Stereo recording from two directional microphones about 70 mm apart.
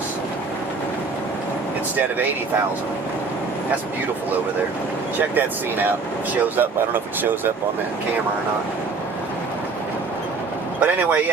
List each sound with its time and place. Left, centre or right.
5.3 s speech: right
10.8 s speech: right